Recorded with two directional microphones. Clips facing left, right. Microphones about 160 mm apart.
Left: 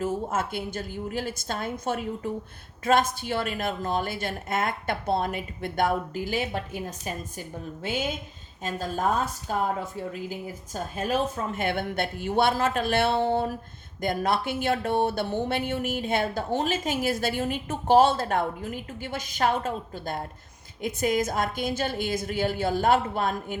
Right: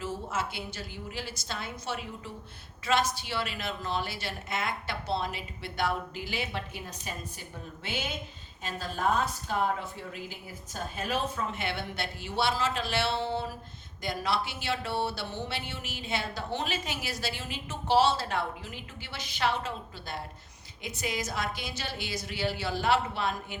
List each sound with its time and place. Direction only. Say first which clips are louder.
0.0 s speech: left 6 dB; 50° left (ahead or behind)
8.6 s a woman's voice: left 3 dB; 45° left (ahead or behind)
10.9 s speech: left 5 dB; 45° left (ahead or behind)